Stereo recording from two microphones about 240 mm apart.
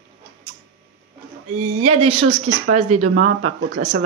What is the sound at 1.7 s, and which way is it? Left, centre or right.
Speech, right.